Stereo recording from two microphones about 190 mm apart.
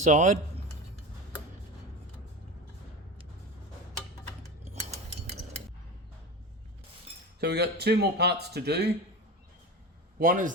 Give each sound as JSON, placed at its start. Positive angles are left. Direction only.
{"t": 0.0, "sound": "speech", "side_deg": -40}
{"t": 7.3, "sound": "speech", "side_deg": -60}
{"t": 10.2, "sound": "a man's voice", "side_deg": -45}